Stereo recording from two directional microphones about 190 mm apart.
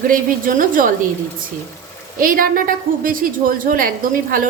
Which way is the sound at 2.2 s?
45° right (ahead or behind).